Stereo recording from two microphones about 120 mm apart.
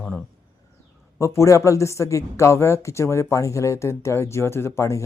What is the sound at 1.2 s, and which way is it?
Speech, 25° left (ahead or behind).